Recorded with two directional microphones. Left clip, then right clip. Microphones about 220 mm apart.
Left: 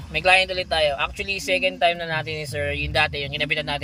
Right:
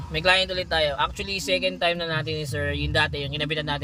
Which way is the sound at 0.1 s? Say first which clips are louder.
Left 3 dB; 10° right (ahead or behind).